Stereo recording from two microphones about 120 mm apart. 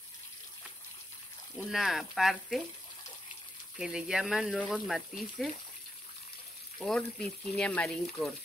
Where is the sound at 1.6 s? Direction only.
Centre (ahead or behind).